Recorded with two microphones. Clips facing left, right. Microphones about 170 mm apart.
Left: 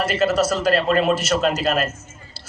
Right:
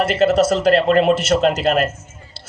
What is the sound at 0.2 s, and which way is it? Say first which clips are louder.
A man's voice: right 5 dB; 60° right (ahead or behind).